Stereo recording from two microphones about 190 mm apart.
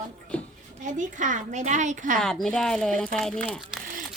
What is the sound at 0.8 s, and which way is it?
A woman's voice, 40° right (ahead or behind).